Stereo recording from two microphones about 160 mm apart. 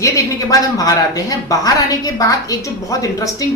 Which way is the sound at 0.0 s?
20° left (ahead or behind).